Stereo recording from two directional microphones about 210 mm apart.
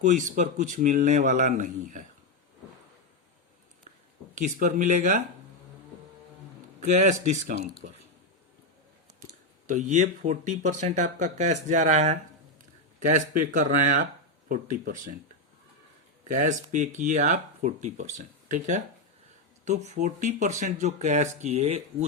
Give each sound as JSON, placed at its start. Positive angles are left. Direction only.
{"t": 0.0, "sound": "speech", "side_deg": -35}
{"t": 4.4, "sound": "speech", "side_deg": -35}
{"t": 6.7, "sound": "speech", "side_deg": -35}
{"t": 9.6, "sound": "speech", "side_deg": -35}
{"t": 16.3, "sound": "speech", "side_deg": -35}